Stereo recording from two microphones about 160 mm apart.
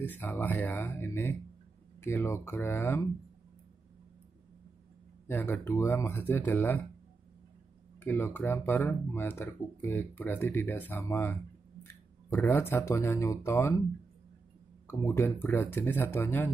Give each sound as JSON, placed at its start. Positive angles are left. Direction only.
{"t": 0.0, "sound": "speech", "side_deg": 10}
{"t": 5.3, "sound": "speech", "side_deg": 15}
{"t": 8.0, "sound": "speech", "side_deg": 15}
{"t": 14.9, "sound": "speech", "side_deg": 15}